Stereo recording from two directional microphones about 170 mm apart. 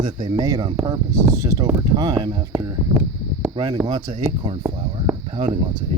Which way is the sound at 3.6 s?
20° right (ahead or behind).